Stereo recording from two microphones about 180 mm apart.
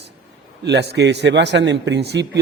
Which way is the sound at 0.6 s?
70° right (ahead or behind).